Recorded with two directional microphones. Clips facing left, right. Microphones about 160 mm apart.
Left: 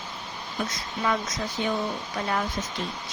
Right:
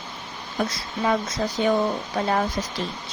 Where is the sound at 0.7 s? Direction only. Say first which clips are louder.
Right 2 dB; 35° right (ahead or behind).